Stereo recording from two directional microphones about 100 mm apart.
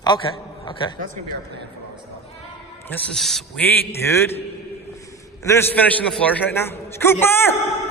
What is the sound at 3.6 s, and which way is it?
Speech, 20° left (ahead or behind).